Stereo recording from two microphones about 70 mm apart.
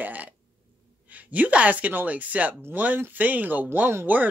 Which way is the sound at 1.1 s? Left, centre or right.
Right.